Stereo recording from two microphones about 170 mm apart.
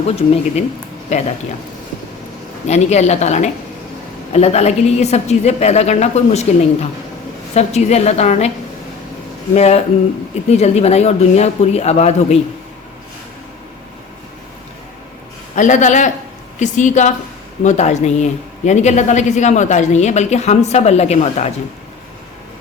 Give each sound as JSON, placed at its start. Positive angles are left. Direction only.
{"t": 1.1, "sound": "a woman's voice", "side_deg": 40}
{"t": 2.6, "sound": "a woman's voice", "side_deg": 40}
{"t": 9.6, "sound": "a woman's voice", "side_deg": 40}
{"t": 15.5, "sound": "speech", "side_deg": 45}